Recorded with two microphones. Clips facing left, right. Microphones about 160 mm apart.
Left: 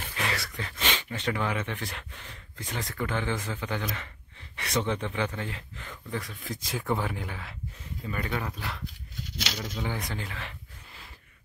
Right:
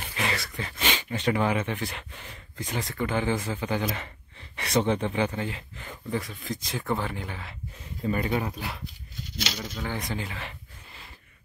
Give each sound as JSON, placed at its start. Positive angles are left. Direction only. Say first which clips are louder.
{"t": 0.0, "sound": "speech", "louder": "right 2 dB", "side_deg": 0}
{"t": 1.8, "sound": "speech", "louder": "right 4 dB", "side_deg": -5}
{"t": 5.1, "sound": "speech", "louder": "right 4 dB", "side_deg": -15}
{"t": 6.2, "sound": "speech", "louder": "right 3 dB", "side_deg": 5}
{"t": 8.1, "sound": "speech", "louder": "right 5 dB", "side_deg": -20}
{"t": 9.6, "sound": "speech", "louder": "left 2 dB", "side_deg": 5}